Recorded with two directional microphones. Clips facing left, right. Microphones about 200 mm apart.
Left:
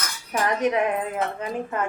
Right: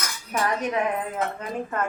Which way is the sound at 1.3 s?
10° left (ahead or behind).